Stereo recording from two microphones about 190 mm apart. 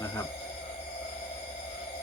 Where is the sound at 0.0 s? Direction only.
15° left (ahead or behind).